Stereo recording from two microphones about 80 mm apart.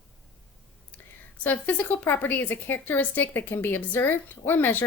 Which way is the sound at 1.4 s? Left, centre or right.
Left.